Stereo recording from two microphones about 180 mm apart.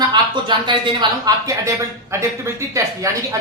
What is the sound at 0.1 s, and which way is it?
A man's voice, 25° right (ahead or behind).